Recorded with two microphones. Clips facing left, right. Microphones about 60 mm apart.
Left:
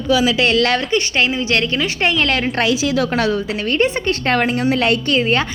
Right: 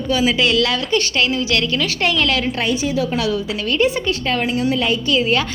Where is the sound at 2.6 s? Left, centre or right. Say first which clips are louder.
Left 3 dB; left.